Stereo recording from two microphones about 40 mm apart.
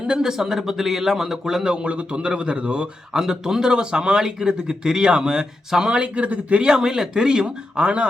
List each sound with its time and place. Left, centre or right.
0.1 s a man's voice: centre; by 2.9 s right
3.1 s speech: centre; by 6.7 s right
6.7 s a man's voice: centre